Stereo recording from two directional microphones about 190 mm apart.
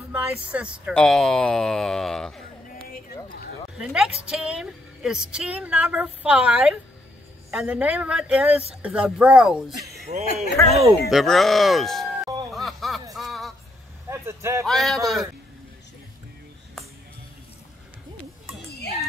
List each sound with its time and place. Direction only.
0.1 s a woman's voice: 5° right (ahead or behind)
3.7 s a woman's voice: 5° right (ahead or behind)
10.1 s speech: 35° right (ahead or behind)
11.1 s a woman's voice: centre (ahead or behind)
12.4 s music: centre (ahead or behind)
13.1 s a sound: centre (ahead or behind)
14.2 s speech: 15° right (ahead or behind)
14.7 s a woman's voice: centre (ahead or behind)